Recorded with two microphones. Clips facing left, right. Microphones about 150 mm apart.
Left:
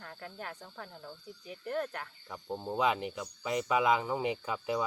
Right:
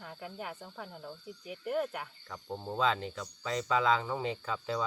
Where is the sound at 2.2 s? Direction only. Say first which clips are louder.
Left 6 dB; 10° left (ahead or behind).